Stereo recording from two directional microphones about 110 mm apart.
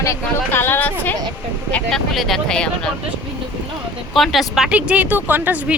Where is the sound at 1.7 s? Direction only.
5° left (ahead or behind).